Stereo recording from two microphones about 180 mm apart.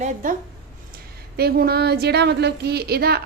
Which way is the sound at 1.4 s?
60° right (ahead or behind).